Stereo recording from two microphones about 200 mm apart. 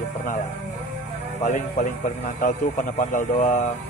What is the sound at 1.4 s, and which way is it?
Speech, 40° left (ahead or behind).